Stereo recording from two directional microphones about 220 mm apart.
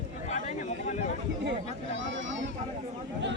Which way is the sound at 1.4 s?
60° right (ahead or behind).